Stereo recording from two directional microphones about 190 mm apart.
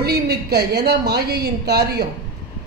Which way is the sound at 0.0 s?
55° right (ahead or behind).